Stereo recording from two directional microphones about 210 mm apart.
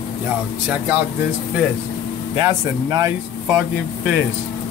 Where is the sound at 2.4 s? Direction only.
15° right (ahead or behind).